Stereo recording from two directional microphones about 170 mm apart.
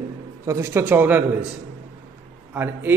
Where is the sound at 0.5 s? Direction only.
15° right (ahead or behind).